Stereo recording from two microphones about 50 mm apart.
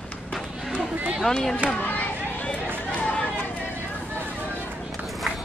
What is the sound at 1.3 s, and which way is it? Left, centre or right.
Speech, centre.